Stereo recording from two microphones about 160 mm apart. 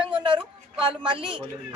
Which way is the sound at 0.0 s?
30° right (ahead or behind).